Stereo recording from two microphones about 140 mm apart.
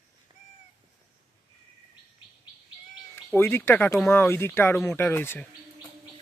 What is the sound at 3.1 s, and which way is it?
Speech, 15° left (ahead or behind).